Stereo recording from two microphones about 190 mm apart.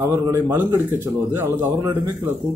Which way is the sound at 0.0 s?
10° right (ahead or behind).